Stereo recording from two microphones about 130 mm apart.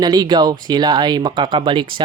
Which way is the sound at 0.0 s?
35° right (ahead or behind).